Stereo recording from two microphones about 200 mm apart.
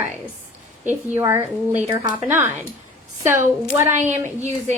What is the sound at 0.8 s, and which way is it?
Speech, 10° right (ahead or behind).